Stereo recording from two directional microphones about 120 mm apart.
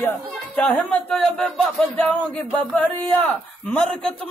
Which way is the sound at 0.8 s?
10° left (ahead or behind).